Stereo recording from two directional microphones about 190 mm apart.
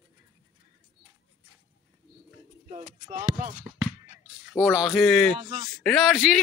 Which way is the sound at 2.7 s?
40° right (ahead or behind).